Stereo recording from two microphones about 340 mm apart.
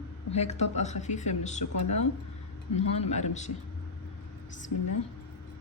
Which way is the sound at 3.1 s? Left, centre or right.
Centre.